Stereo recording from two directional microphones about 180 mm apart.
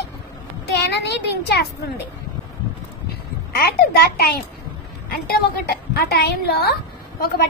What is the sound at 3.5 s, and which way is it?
A woman's voice, 60° left (ahead or behind).